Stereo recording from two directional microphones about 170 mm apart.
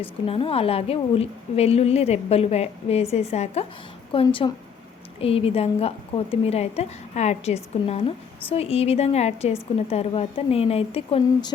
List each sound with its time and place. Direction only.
0.0 s a woman's voice: 35° left (ahead or behind)